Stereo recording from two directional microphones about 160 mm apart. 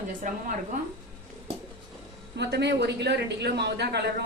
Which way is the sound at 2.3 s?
90° right.